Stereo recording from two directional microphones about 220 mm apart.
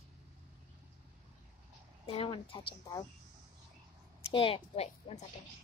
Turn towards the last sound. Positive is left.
turn(degrees=25)  # may be behind; listen again after turning